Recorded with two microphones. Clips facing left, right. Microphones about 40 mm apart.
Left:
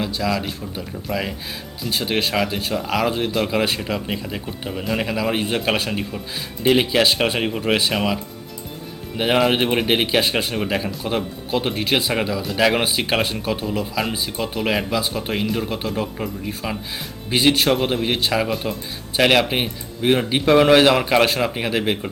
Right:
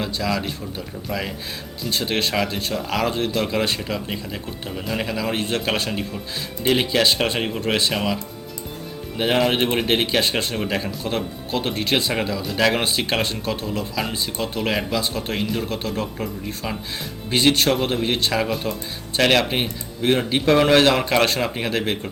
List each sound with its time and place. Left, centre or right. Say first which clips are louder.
0.0 s speech: left 1 dB; centre